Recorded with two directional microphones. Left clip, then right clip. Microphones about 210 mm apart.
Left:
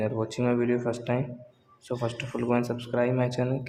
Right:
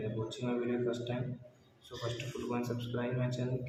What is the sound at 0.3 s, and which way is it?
Speech, 55° left (ahead or behind).